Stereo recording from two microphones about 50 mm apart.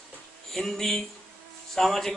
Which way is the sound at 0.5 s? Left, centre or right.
Centre.